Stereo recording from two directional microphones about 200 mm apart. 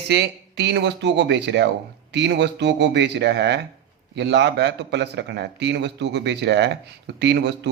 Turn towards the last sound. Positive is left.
turn(degrees=-60)  # may be behind; listen again after turning